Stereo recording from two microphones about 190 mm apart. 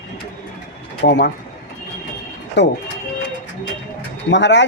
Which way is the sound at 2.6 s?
65° left (ahead or behind).